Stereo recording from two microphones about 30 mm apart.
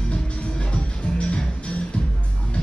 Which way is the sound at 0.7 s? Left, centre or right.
Left.